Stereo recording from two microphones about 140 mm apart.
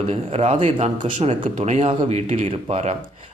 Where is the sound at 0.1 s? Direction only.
50° right (ahead or behind).